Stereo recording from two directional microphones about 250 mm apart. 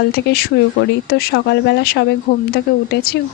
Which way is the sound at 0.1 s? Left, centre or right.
Left.